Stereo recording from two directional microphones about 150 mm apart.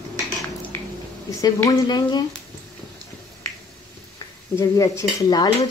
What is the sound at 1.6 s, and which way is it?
Speech, 25° left (ahead or behind).